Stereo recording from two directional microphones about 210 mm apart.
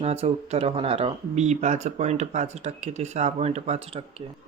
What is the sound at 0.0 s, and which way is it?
Speech, 30° right (ahead or behind).